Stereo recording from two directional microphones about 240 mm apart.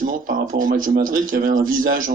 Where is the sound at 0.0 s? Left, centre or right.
Right.